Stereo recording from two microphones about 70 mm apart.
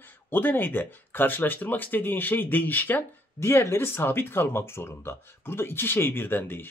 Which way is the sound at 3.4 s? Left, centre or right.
Left.